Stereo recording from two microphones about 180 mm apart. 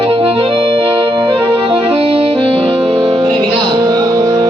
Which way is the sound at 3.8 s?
20° right (ahead or behind).